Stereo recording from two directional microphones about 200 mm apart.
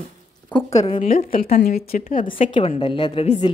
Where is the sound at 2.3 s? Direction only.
25° left (ahead or behind).